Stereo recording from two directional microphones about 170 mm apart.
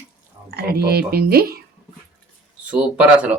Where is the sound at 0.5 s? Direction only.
65° right (ahead or behind).